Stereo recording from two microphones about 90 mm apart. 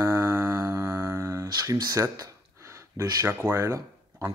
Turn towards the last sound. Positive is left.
turn(degrees=-30)  # may be behind; listen again after turning